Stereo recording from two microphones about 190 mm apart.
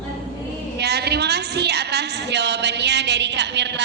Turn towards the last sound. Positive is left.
turn(degrees=-65)  # may be behind; listen again after turning